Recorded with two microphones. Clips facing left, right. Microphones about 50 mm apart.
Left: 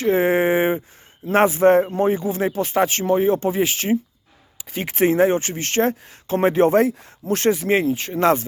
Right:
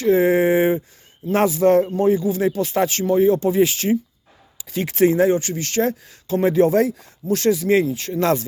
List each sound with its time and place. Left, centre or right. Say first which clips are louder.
0.0 s a sound: right 2 dB; left
1.3 s speech: left 1 dB; left
5.0 s speech: right 1 dB; left